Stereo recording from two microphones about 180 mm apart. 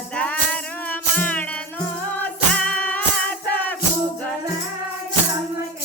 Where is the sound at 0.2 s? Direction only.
10° left (ahead or behind).